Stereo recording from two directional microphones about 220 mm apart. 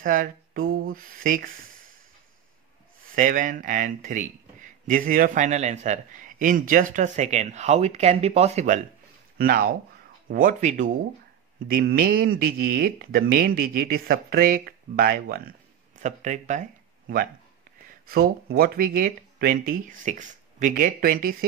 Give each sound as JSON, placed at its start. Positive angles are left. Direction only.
{"t": 0.0, "sound": "speech", "side_deg": -40}
{"t": 3.2, "sound": "speech", "side_deg": -35}
{"t": 16.0, "sound": "speech", "side_deg": -35}
{"t": 18.0, "sound": "speech", "side_deg": -45}